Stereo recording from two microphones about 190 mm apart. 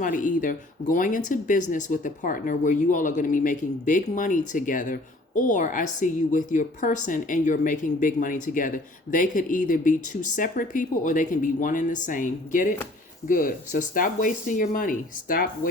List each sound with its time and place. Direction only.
0.0 s speech: 45° left (ahead or behind)